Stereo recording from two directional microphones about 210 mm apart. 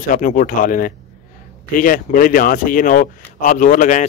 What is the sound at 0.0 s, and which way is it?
Speech, 40° left (ahead or behind).